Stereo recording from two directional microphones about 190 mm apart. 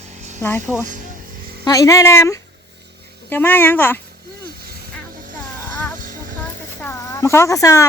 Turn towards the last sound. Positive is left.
turn(degrees=15)  # may be behind; listen again after turning